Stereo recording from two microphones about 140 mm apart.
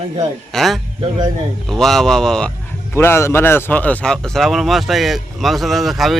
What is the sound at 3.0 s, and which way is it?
Speech, 20° left (ahead or behind).